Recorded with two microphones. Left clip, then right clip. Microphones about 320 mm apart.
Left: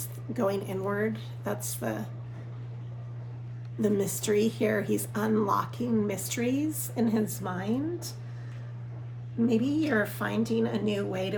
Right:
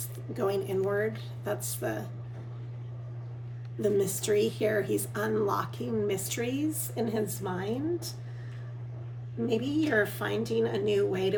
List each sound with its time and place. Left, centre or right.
0.3 s speech: centre
3.8 s speech: centre
9.5 s speech: centre